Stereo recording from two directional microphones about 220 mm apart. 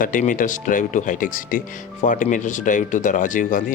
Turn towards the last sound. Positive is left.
turn(degrees=35)  # may be behind; listen again after turning